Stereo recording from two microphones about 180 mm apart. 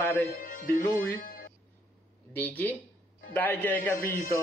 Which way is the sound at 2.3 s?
10° left (ahead or behind).